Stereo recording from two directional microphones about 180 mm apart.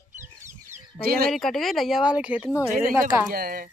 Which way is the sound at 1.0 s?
55° right (ahead or behind).